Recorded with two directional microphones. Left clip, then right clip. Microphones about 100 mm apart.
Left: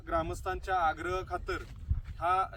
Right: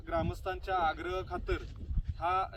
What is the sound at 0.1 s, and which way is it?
Speech, 25° left (ahead or behind).